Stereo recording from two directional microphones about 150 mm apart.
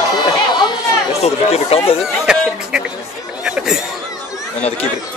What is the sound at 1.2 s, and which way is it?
Speech, 45° left (ahead or behind).